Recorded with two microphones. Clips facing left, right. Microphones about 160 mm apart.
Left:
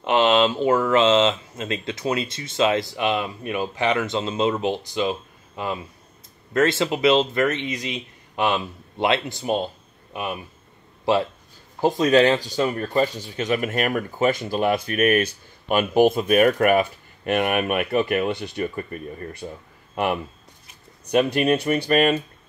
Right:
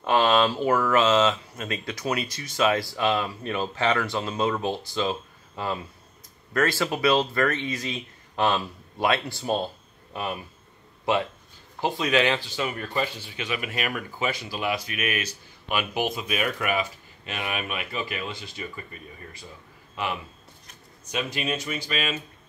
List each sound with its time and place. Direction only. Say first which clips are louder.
0.0 s speech: left 3 dB; 20° left (ahead or behind)
6.5 s speech: left 4 dB; 25° left (ahead or behind)
11.8 s speech: left 7 dB; 40° left (ahead or behind)
21.0 s speech: left 11 dB; 60° left (ahead or behind)